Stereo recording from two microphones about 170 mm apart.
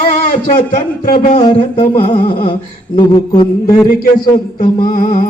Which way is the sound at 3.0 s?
30° left (ahead or behind).